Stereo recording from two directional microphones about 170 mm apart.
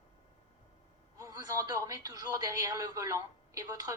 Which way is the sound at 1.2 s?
20° right (ahead or behind).